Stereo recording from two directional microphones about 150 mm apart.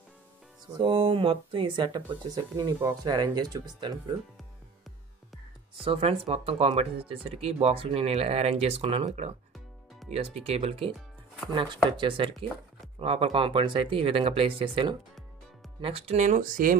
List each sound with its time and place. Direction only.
0.7 s speech: 35° right (ahead or behind)
2.5 s speech: 20° right (ahead or behind)
5.9 s speech: 40° right (ahead or behind)
12.0 s speech: 35° right (ahead or behind); by 16.7 s 65° right (ahead or behind)